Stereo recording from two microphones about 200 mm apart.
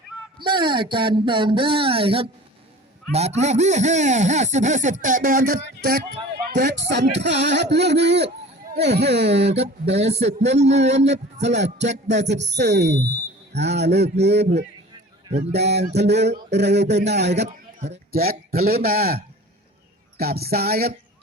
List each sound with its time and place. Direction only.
0.3 s speech: 25° right (ahead or behind); by 17.3 s 60° right (ahead or behind)
17.3 s a sound: 35° right (ahead or behind)
18.1 s a man's voice: 45° right (ahead or behind)